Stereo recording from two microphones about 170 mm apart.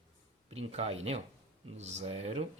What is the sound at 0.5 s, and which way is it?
A man's voice, 35° right (ahead or behind).